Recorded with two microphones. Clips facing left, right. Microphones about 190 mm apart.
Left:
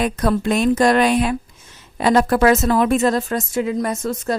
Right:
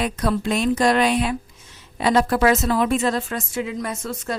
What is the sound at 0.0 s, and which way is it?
Speech, 50° left (ahead or behind).